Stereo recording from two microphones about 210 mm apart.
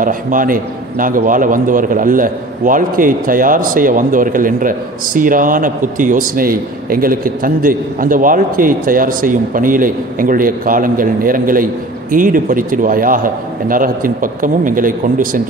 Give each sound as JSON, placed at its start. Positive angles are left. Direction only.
{"t": 0.0, "sound": "a man's voice", "side_deg": -40}